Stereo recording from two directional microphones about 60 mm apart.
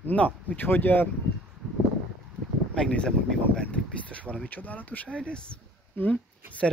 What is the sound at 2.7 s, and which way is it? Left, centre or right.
Speech, centre.